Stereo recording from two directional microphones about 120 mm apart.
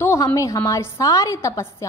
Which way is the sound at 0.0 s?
25° left (ahead or behind).